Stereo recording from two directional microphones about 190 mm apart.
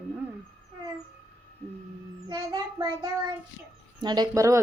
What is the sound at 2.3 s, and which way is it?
Child singing, 20° right (ahead or behind).